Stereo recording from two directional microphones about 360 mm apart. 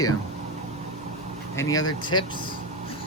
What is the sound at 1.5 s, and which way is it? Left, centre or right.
Speech, centre.